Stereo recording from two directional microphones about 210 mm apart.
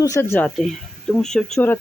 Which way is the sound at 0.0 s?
15° left (ahead or behind).